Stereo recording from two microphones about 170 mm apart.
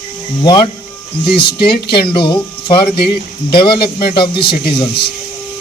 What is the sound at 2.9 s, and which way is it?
Speech, 65° left (ahead or behind).